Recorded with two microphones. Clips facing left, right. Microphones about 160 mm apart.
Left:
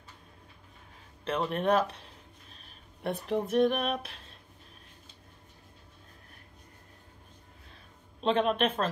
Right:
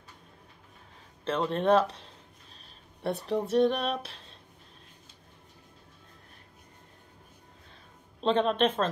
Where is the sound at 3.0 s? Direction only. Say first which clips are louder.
Right 1 dB; 35° right (ahead or behind).